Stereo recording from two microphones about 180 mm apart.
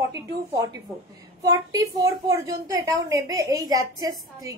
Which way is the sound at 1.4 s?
20° right (ahead or behind).